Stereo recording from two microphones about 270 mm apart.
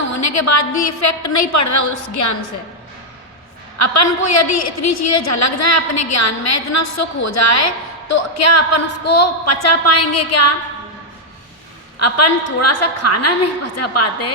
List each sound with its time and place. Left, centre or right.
0.1 s a woman's voice: left
4.0 s a woman's voice: left
11.9 s a woman's voice: left